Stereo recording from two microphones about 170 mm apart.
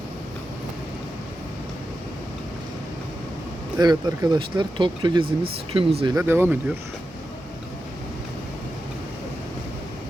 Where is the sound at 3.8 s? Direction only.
25° right (ahead or behind).